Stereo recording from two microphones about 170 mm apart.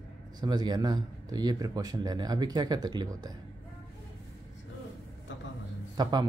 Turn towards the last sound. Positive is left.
turn(degrees=-25)  # may be behind; listen again after turning